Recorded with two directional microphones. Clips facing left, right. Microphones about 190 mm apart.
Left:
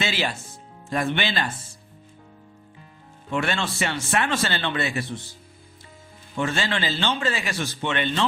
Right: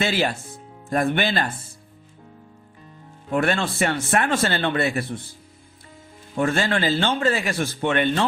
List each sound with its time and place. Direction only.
0.0 s speech: 55° right (ahead or behind)
3.2 s speech: 50° right (ahead or behind)
6.4 s speech: 55° right (ahead or behind)